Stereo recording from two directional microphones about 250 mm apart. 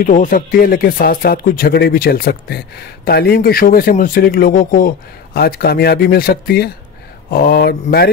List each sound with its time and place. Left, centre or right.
0.0 s speech: left